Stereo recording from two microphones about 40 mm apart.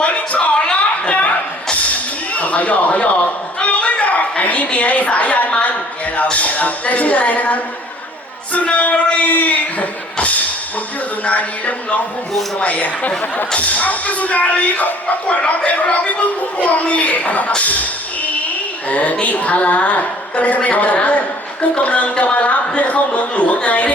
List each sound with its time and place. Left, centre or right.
0.0 s a sound: left
6.3 s a woman's voice: left
18.9 s a woman's voice: left